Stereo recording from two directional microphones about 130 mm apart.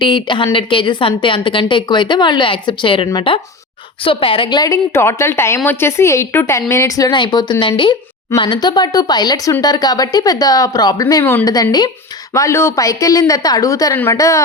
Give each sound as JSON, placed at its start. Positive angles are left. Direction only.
{"t": 0.0, "sound": "a woman's voice", "side_deg": 35}
{"t": 4.9, "sound": "speech", "side_deg": 20}
{"t": 11.5, "sound": "speech", "side_deg": 30}